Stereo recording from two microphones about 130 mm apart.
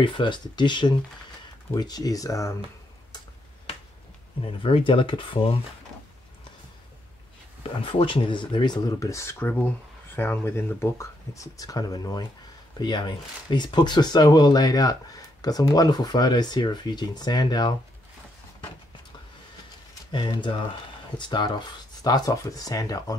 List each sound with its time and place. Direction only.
0.0 s speech: 35° left (ahead or behind)
4.4 s speech: 40° left (ahead or behind)
7.8 s speech: 40° left (ahead or behind)
20.1 s speech: 40° left (ahead or behind)